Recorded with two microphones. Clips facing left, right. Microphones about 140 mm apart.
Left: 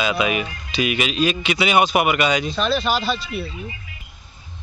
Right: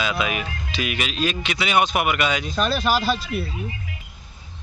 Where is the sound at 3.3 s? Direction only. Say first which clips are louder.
Right 1 dB; 50° right (ahead or behind).